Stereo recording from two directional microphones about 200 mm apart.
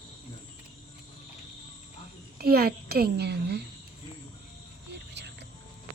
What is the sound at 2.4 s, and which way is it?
A woman's voice, 50° right (ahead or behind).